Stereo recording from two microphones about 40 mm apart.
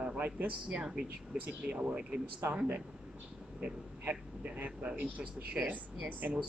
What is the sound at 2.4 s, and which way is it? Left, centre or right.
Speech, right.